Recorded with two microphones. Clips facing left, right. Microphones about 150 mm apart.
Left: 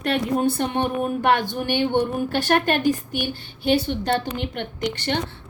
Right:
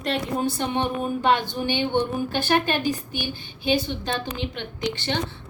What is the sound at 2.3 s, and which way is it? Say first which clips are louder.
A woman's voice: left 2 dB; 65° left (ahead or behind).